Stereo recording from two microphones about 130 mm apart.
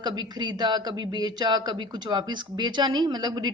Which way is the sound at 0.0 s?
35° right (ahead or behind).